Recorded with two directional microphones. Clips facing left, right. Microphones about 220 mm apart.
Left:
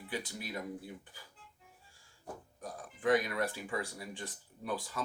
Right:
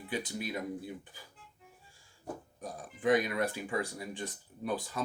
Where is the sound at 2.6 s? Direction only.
20° right (ahead or behind).